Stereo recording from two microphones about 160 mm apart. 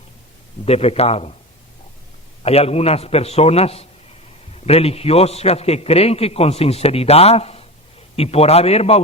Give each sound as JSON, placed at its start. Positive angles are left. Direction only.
{"t": 0.6, "sound": "a man's voice", "side_deg": 40}
{"t": 2.4, "sound": "a man's voice", "side_deg": 40}